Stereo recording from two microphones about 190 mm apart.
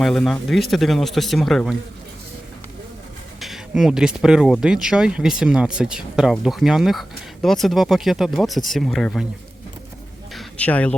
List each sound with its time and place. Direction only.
0.0 s speech: centre (ahead or behind)
3.4 s speech: centre (ahead or behind)
10.3 s a sound: 5° left (ahead or behind)